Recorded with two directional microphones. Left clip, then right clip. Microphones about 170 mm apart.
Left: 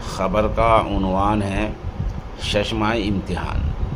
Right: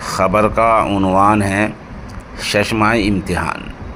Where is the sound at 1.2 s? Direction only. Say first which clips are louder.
Right 9 dB; 30° right (ahead or behind).